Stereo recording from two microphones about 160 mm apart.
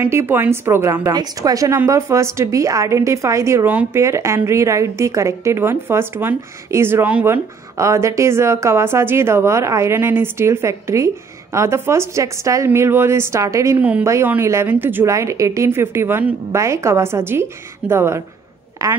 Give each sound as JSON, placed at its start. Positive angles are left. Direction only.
{"t": 0.0, "sound": "a woman's voice", "side_deg": -15}